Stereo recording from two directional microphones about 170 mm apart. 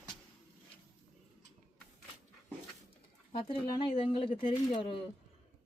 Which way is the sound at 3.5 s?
30° left (ahead or behind).